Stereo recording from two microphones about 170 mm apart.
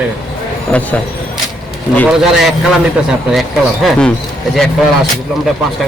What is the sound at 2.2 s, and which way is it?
Speech, centre (ahead or behind).